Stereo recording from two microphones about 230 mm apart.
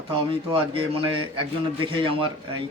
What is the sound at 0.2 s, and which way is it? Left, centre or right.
Speech, right.